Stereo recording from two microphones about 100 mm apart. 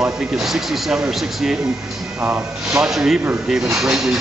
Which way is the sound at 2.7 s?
5° right (ahead or behind).